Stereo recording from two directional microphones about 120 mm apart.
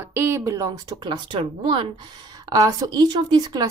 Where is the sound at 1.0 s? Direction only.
40° right (ahead or behind).